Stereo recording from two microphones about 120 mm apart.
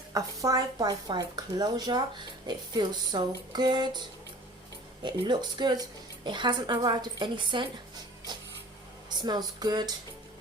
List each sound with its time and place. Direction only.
0.1 s speech: 30° right (ahead or behind)
5.0 s speech: 40° right (ahead or behind)
8.3 s a sound: 35° right (ahead or behind)
9.0 s speech: 35° right (ahead or behind)